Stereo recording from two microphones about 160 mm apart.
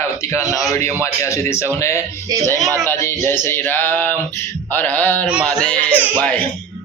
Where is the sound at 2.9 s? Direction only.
15° left (ahead or behind).